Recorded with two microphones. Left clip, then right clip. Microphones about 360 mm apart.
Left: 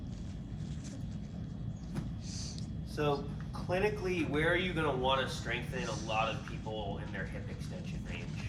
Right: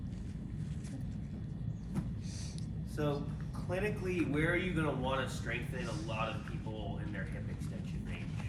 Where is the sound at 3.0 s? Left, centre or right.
Centre.